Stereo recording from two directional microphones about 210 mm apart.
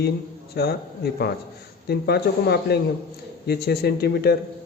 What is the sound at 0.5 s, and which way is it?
Speech, 50° left (ahead or behind).